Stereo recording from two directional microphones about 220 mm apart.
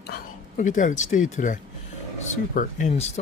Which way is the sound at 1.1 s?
35° left (ahead or behind).